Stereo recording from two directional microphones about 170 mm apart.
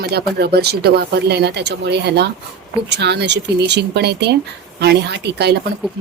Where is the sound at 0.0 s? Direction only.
70° right (ahead or behind).